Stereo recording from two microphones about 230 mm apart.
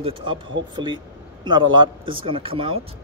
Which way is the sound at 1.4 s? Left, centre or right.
Centre.